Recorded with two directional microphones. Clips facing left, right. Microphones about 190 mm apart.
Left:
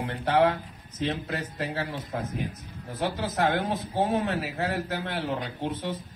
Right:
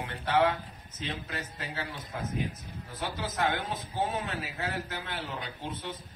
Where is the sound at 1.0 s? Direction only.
40° left (ahead or behind).